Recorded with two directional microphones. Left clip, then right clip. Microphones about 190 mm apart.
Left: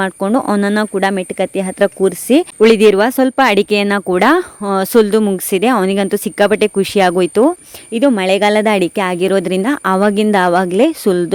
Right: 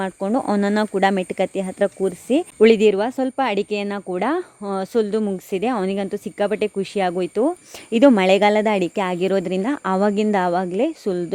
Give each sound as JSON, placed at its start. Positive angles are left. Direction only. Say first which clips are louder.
{"t": 0.0, "sound": "speech", "louder": "left 7 dB", "side_deg": 20}
{"t": 7.9, "sound": "speech", "louder": "left 1 dB", "side_deg": -5}